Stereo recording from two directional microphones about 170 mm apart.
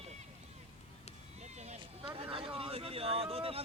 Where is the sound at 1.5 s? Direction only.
40° right (ahead or behind).